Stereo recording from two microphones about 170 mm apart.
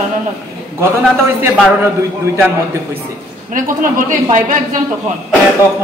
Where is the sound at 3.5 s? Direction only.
50° right (ahead or behind).